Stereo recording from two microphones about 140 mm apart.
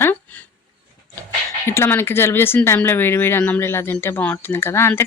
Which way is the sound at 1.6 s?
15° left (ahead or behind).